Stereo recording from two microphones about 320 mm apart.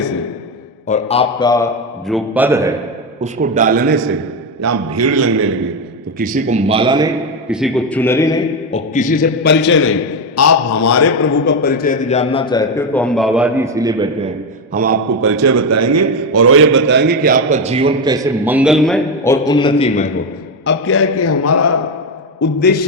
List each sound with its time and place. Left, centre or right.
0.9 s a man's voice: left; by 2.7 s centre
3.2 s a man's voice: right
4.6 s a man's voice: right
6.1 s speech: right
7.5 s a man's voice: centre; by 9.9 s left
10.3 s a man's voice: left
11.4 s a man's voice: left; by 14.3 s centre
14.7 s a man's voice: right
15.2 s a man's voice: right; by 20.1 s centre
20.7 s a man's voice: left
22.4 s a man's voice: left